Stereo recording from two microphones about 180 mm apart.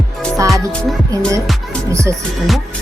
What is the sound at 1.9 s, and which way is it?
Speech, 15° right (ahead or behind).